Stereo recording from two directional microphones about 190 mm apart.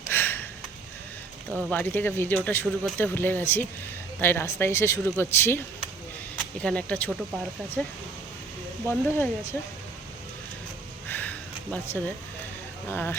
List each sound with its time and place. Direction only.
0.1 s sniff: 10° left (ahead or behind)
1.5 s speech: 10° left (ahead or behind)
11.1 s a sound: 10° left (ahead or behind)
12.9 s speech: 10° left (ahead or behind)